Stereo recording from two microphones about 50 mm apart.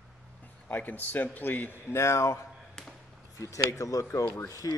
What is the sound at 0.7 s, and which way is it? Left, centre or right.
Speech, left.